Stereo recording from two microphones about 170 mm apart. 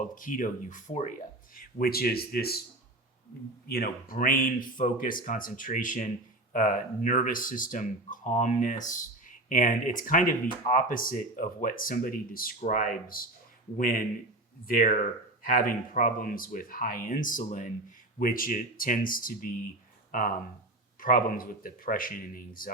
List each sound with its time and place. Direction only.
0.0 s speech: 50° left (ahead or behind)
1.5 s speech: 60° left (ahead or behind)
3.7 s speech: 60° left (ahead or behind)